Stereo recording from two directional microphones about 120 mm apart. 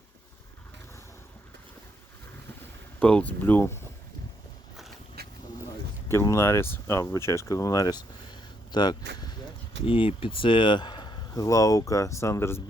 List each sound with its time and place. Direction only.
3.0 s speech: 10° left (ahead or behind)
6.1 s speech: 25° left (ahead or behind)
9.8 s speech: 45° left (ahead or behind); by 12.6 s 20° left (ahead or behind)